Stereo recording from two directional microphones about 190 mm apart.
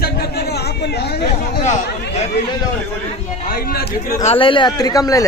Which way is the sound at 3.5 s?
50° left (ahead or behind).